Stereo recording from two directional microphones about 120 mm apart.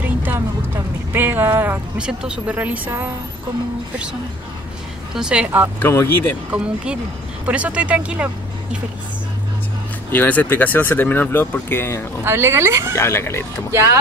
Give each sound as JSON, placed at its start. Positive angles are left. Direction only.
{"t": 0.0, "sound": "music", "side_deg": -15}
{"t": 1.1, "sound": "speech", "side_deg": -15}
{"t": 5.1, "sound": "speech", "side_deg": -5}
{"t": 5.8, "sound": "speech", "side_deg": 20}
{"t": 6.5, "sound": "speech", "side_deg": -10}
{"t": 10.1, "sound": "speech", "side_deg": 15}
{"t": 12.3, "sound": "speech", "side_deg": -20}
{"t": 12.9, "sound": "speech", "side_deg": 20}